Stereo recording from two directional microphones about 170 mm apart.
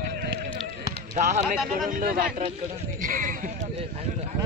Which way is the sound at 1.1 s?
45° right (ahead or behind).